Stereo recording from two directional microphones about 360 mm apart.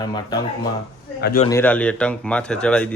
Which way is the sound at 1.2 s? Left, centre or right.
Left.